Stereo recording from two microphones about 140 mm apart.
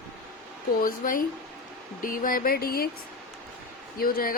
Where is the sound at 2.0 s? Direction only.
80° left.